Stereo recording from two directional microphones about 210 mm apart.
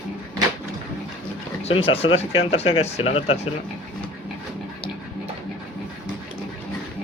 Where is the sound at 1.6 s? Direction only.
25° left (ahead or behind).